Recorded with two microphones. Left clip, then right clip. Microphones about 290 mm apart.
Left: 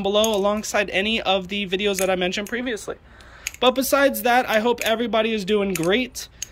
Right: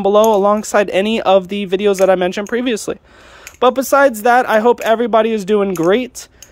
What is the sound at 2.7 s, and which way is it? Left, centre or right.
Speech, right.